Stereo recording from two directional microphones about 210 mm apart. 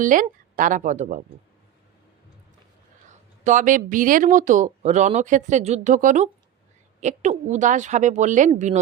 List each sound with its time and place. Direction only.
0.0 s speech: 40° right (ahead or behind)
3.1 s speech: 35° right (ahead or behind)